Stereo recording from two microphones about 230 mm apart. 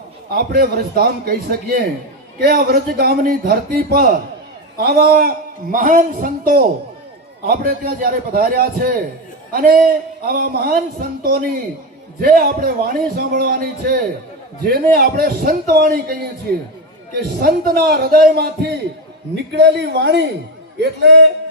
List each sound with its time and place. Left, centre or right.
0.3 s a man's voice: right
17.4 s a man's voice: right